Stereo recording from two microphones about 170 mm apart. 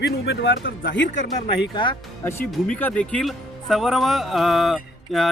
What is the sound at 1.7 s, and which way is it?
Speech, 30° left (ahead or behind).